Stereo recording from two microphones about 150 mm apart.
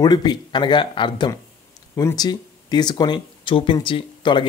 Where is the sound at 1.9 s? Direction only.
20° left (ahead or behind).